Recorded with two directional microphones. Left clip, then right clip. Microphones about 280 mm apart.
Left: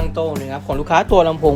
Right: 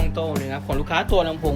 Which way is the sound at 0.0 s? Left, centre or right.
Centre.